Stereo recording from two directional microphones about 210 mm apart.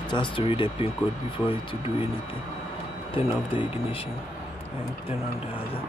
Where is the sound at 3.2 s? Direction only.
25° left (ahead or behind).